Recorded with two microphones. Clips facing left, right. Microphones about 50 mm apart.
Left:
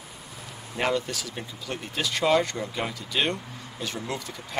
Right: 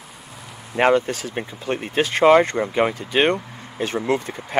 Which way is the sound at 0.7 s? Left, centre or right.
Right.